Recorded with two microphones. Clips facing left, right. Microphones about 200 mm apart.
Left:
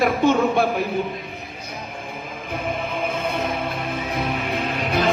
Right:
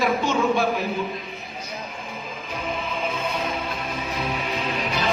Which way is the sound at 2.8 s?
60° left (ahead or behind).